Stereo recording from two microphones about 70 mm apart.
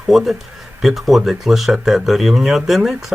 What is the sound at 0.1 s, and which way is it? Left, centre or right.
Speech, centre.